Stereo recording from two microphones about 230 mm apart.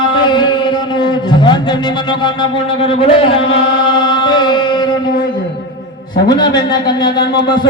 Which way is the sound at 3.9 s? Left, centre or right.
Centre.